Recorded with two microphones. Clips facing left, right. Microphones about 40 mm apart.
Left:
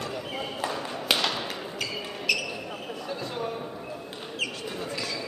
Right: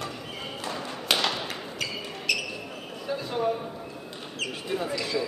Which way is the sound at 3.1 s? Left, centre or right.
Centre.